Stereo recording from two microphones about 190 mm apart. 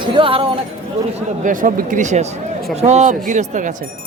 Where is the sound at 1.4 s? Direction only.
45° right (ahead or behind).